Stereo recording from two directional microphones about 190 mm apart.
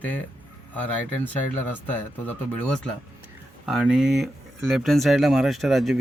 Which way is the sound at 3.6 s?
5° right (ahead or behind).